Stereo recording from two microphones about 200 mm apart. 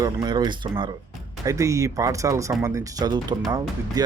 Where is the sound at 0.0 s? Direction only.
20° right (ahead or behind).